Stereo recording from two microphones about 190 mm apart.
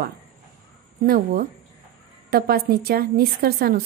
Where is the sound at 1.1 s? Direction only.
50° right (ahead or behind).